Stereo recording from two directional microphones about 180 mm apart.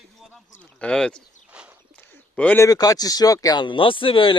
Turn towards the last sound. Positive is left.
turn(degrees=30)  # may be behind; listen again after turning